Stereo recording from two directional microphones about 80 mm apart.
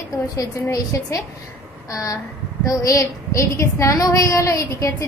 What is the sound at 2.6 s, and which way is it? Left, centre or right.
A woman's voice, left.